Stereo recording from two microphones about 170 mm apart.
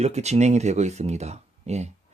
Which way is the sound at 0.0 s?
40° right (ahead or behind).